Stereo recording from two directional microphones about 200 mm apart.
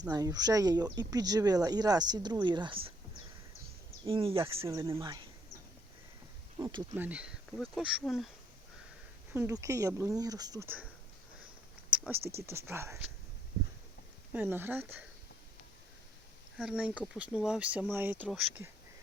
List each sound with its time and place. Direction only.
0.1 s speech: 20° right (ahead or behind)
4.0 s speech: 25° right (ahead or behind)
4.8 s speech: 15° right (ahead or behind)
6.6 s speech: 20° right (ahead or behind)
6.9 s speech: 10° right (ahead or behind)
9.3 s speech: 15° right (ahead or behind)
11.9 s a sound: 5° right (ahead or behind)
12.3 s speech: 15° right (ahead or behind)
14.3 s speech: 10° right (ahead or behind)
16.6 s speech: 5° right (ahead or behind)